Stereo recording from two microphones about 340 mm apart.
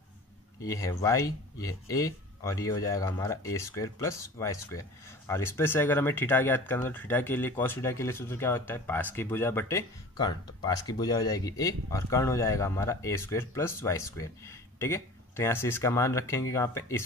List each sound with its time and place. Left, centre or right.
0.6 s speech: centre